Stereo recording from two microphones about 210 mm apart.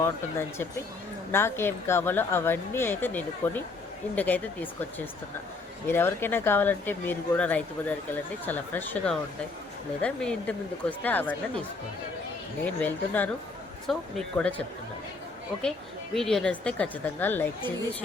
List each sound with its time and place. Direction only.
0.0 s speech: 10° left (ahead or behind)
12.6 s speech: 5° left (ahead or behind)
16.1 s speech: centre (ahead or behind)